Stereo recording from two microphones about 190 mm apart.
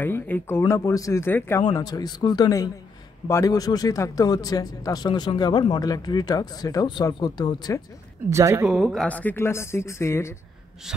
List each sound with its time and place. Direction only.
0.0 s speech: 10° left (ahead or behind)
8.3 s speech: 15° right (ahead or behind)
8.6 s speech: centre (ahead or behind)